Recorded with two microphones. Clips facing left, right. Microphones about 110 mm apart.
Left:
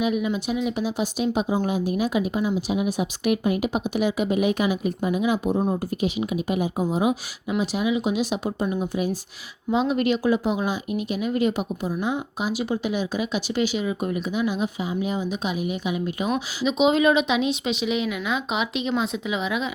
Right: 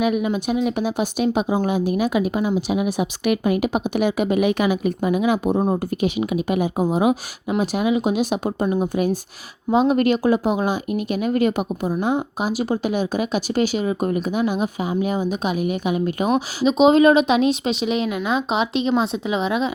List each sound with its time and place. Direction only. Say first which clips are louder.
0.0 s speech: right 3 dB; 55° right (ahead or behind); by 19.7 s 30° right (ahead or behind)